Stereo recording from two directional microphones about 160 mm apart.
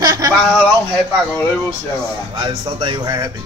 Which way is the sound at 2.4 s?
30° right (ahead or behind).